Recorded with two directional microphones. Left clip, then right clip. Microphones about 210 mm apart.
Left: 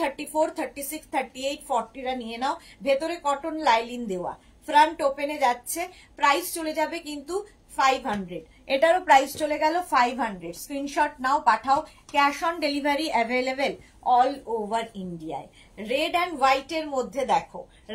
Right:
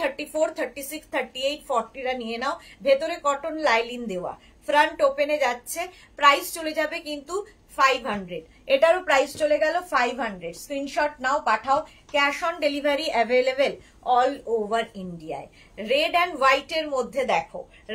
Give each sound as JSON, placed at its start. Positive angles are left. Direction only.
{"t": 0.0, "sound": "a woman's voice", "side_deg": -15}